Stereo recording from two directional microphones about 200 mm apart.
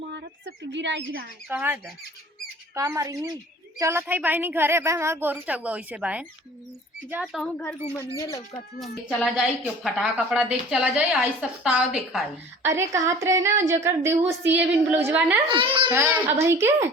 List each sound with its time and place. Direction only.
0.1 s bird: 60° right (ahead or behind)
1.5 s a woman's voice: 10° right (ahead or behind)
7.4 s a woman's voice: 5° left (ahead or behind)
8.2 s speech: 15° left (ahead or behind)
8.8 s a woman's voice: centre (ahead or behind)
15.4 s a child's voice: 25° right (ahead or behind)
15.9 s a woman's voice: 10° right (ahead or behind)